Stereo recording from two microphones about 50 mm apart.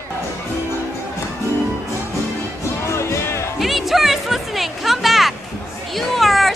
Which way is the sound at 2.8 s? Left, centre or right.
Left.